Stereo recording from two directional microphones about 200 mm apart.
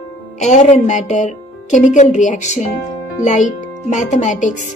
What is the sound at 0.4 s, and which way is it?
A woman's voice, 35° left (ahead or behind).